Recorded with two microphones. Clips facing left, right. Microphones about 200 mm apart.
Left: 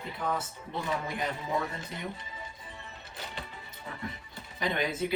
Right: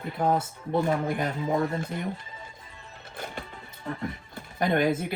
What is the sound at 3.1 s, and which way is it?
Music, 50° right (ahead or behind).